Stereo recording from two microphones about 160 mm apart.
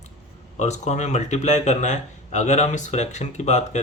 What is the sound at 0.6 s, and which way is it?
Speech, 45° left (ahead or behind).